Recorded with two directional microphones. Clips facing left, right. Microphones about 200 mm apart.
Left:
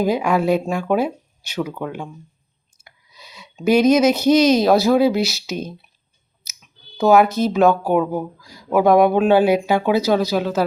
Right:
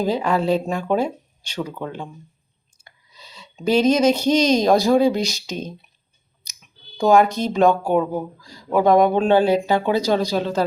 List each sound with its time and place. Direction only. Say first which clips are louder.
0.0 s speech: left 2 dB; 10° left (ahead or behind)
2.8 s a sound: left 1 dB; 10° left (ahead or behind)
3.5 s speech: left 3 dB; 10° left (ahead or behind)
6.4 s clicking: even; 5° left (ahead or behind)
7.9 s speech: left 1 dB; 5° left (ahead or behind)